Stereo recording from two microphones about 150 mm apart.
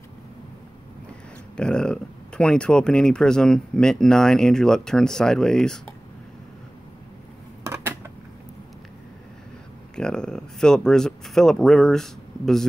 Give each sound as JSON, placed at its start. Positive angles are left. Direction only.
{"t": 1.6, "sound": "speech", "side_deg": 5}
{"t": 7.6, "sound": "dishes", "side_deg": -15}
{"t": 9.9, "sound": "speech", "side_deg": 5}